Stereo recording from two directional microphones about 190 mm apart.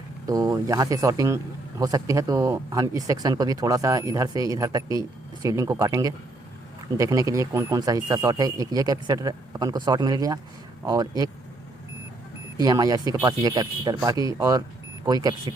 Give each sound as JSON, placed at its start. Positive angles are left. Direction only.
{"t": 0.3, "sound": "speech", "side_deg": -20}
{"t": 12.5, "sound": "speech", "side_deg": -20}